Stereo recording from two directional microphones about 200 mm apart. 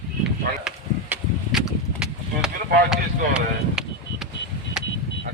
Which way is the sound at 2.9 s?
Centre (ahead or behind).